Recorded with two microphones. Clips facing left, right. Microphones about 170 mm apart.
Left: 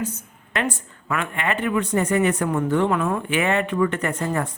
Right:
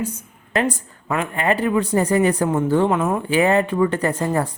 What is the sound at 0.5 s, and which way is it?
Speech, 30° right (ahead or behind).